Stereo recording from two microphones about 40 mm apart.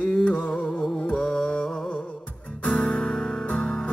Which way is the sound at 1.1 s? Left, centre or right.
Centre.